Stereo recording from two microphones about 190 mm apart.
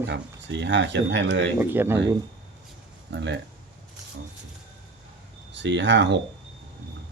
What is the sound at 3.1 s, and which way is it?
Speech, 70° right (ahead or behind).